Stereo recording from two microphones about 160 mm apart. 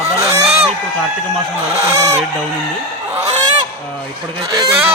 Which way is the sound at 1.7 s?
40° right (ahead or behind).